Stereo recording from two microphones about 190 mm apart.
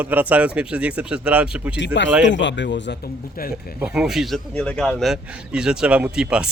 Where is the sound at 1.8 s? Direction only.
70° left (ahead or behind); by 3.5 s 50° left (ahead or behind).